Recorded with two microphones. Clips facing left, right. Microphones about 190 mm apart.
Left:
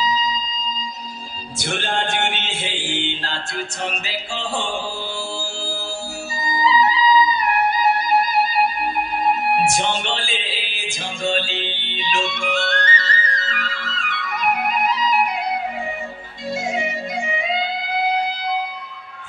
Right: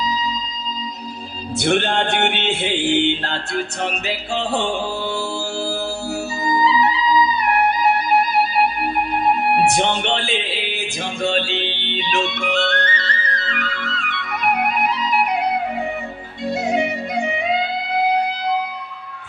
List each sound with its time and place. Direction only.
1.6 s chant: 60° right (ahead or behind)
6.4 s music: 60° right (ahead or behind)
9.6 s music: 60° right (ahead or behind)
16.5 s music: 65° right (ahead or behind)